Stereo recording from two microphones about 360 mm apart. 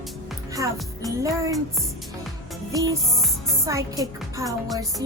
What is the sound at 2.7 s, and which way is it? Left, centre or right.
A woman's voice, centre.